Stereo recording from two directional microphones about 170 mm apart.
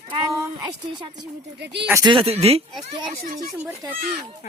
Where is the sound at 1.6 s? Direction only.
85° right.